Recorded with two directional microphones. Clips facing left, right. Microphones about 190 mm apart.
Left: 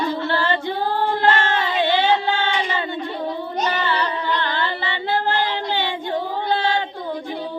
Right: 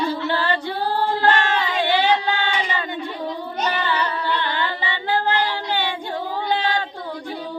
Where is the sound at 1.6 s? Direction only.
20° left (ahead or behind).